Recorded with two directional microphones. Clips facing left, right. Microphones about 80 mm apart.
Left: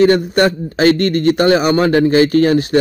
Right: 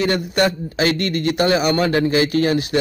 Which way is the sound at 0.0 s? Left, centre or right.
Left.